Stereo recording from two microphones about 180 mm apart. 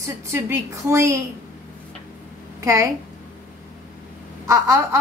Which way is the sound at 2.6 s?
15° right (ahead or behind).